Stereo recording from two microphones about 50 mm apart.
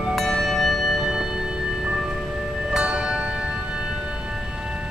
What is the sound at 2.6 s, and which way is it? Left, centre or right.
Music, centre.